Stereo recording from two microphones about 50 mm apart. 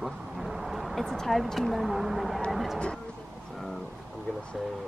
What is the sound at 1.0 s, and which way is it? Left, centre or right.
Speech, centre.